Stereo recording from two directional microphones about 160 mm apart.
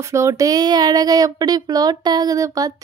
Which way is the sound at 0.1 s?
20° right (ahead or behind).